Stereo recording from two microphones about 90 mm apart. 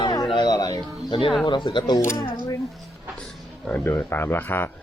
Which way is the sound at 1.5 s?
60° left (ahead or behind).